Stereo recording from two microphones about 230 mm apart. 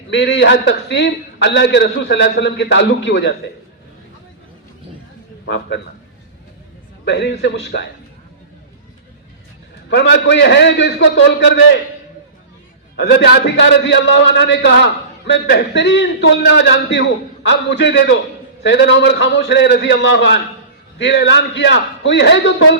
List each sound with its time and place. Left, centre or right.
0.1 s a man's voice: left
5.5 s a man's voice: left
7.0 s a man's voice: left
9.9 s a man's voice: left
13.0 s a man's voice: left